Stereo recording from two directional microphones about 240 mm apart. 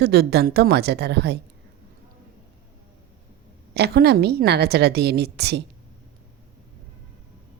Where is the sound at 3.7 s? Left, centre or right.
Right.